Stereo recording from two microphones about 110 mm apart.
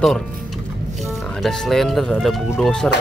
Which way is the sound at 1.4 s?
Centre (ahead or behind).